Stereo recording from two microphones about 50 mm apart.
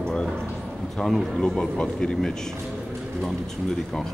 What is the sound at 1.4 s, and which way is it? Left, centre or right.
Speech, centre.